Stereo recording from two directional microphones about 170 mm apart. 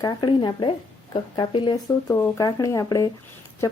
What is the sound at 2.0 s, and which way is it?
Speech, 15° left (ahead or behind).